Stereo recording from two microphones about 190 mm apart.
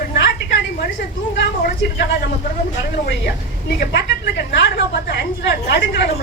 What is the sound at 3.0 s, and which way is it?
Speech, 50° left (ahead or behind).